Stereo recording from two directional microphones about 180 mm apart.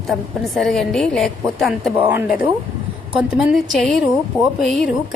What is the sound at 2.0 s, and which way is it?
A woman's voice, 10° right (ahead or behind).